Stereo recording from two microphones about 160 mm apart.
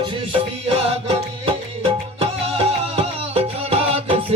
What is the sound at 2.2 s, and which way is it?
Music, 40° right (ahead or behind).